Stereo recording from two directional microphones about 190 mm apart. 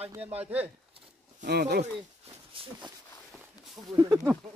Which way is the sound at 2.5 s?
25° right (ahead or behind).